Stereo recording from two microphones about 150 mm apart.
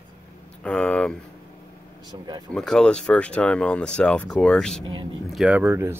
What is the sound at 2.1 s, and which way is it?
Speech, 30° right (ahead or behind).